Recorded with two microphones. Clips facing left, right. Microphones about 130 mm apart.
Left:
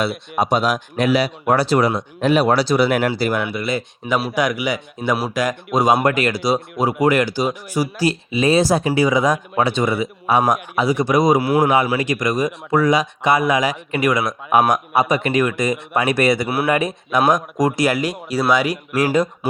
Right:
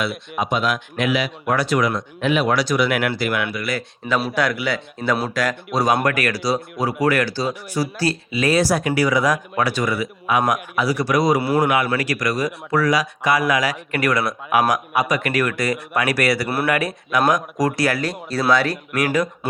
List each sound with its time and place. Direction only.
0.3 s speech: 35° left (ahead or behind)
3.5 s speech: 25° left (ahead or behind)
4.0 s a man's voice: 5° left (ahead or behind)
4.4 s speech: 15° left (ahead or behind)
11.3 s a man's voice: centre (ahead or behind)
11.9 s speech: 20° left (ahead or behind)
18.9 s speech: 25° left (ahead or behind)